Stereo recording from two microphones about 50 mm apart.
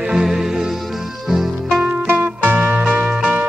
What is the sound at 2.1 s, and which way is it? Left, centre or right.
Music, right.